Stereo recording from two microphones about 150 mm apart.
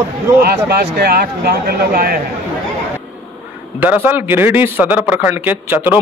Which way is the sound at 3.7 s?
10° right (ahead or behind).